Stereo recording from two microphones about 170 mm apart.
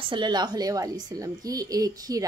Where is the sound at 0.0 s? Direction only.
25° right (ahead or behind).